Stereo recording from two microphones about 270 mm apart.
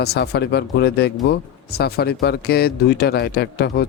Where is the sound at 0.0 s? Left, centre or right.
Left.